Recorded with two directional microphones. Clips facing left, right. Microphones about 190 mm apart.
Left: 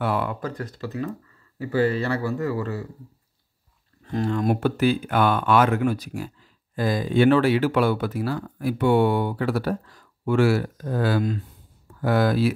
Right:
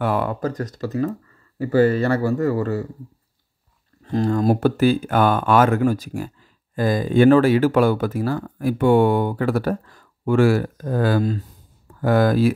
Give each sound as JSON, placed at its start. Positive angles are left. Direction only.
{"t": 0.0, "sound": "speech", "side_deg": -45}
{"t": 4.0, "sound": "speech", "side_deg": -35}